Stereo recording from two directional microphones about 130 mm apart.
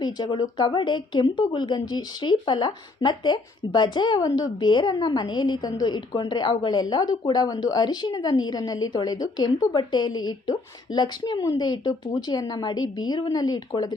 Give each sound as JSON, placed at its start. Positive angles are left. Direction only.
{"t": 0.0, "sound": "a woman's voice", "side_deg": 30}